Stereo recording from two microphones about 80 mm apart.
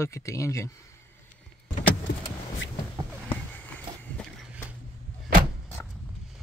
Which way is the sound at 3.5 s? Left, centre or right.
Left.